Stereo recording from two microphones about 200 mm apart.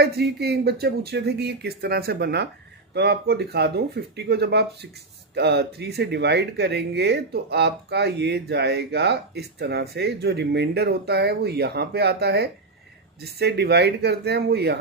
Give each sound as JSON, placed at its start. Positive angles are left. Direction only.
{"t": 0.0, "sound": "speech", "side_deg": -55}